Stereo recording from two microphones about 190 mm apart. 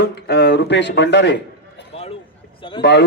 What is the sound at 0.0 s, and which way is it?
Speech, 60° left (ahead or behind).